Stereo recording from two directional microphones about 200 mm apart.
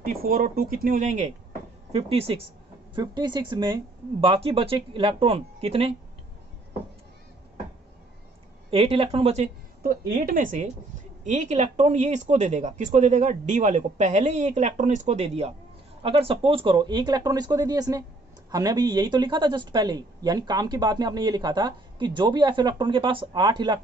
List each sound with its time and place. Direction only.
0.0 s speech: 45° right (ahead or behind); by 5.9 s 30° right (ahead or behind)
8.6 s speech: 25° right (ahead or behind)